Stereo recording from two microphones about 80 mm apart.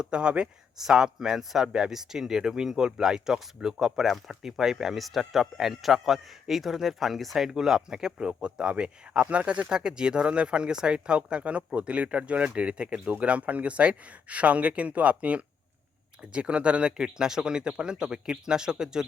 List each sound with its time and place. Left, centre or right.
0.0 s speech: centre